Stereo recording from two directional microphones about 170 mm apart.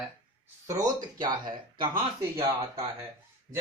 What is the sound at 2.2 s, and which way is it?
Speech, 15° right (ahead or behind).